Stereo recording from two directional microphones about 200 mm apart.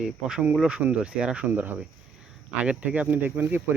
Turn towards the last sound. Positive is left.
turn(degrees=-10)  # may be behind; listen again after turning